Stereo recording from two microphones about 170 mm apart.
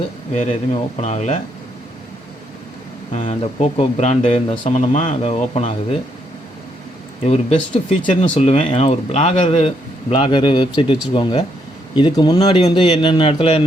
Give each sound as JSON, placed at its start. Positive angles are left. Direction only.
{"t": 1.0, "sound": "speech", "side_deg": 40}
{"t": 3.1, "sound": "speech", "side_deg": 45}
{"t": 7.3, "sound": "speech", "side_deg": 35}
{"t": 12.5, "sound": "speech", "side_deg": 35}